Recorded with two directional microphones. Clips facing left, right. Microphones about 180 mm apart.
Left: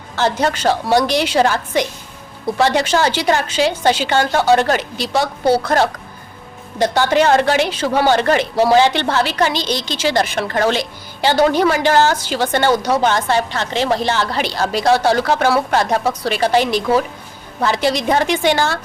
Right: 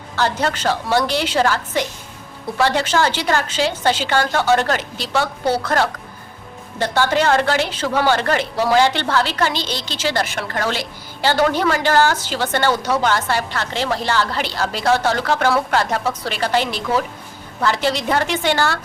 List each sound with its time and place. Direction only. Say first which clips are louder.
0.2 s a woman's voice: left 3 dB; 15° left (ahead or behind)